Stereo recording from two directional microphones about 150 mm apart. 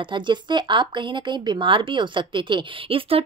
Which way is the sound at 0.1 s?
30° right (ahead or behind).